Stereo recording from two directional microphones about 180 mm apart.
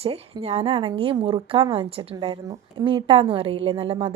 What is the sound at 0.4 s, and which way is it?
A woman's voice, 35° right (ahead or behind).